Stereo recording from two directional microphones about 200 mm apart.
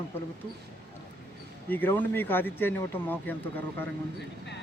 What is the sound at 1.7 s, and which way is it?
Speech, 10° left (ahead or behind).